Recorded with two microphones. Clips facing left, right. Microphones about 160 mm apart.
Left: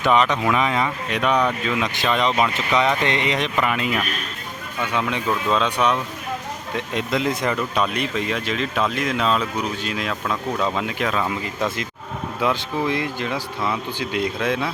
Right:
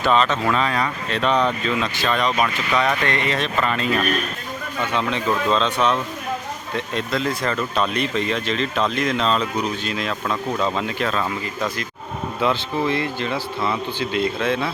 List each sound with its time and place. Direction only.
0.0 s speech: 15° left (ahead or behind)